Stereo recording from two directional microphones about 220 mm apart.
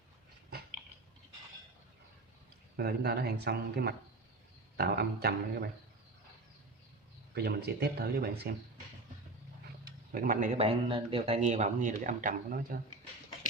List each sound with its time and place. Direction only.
2.7 s speech: 45° right (ahead or behind)
7.3 s speech: 45° right (ahead or behind)
10.1 s speech: 40° right (ahead or behind)
10.6 s speech: 25° right (ahead or behind); by 12.8 s 40° right (ahead or behind)